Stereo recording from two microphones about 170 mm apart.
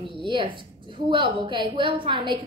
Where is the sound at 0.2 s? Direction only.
30° right (ahead or behind).